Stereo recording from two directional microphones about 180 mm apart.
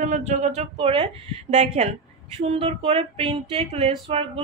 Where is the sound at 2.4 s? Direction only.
35° right (ahead or behind).